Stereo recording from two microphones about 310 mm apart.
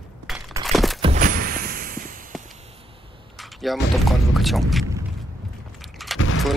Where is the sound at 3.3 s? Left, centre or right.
Centre.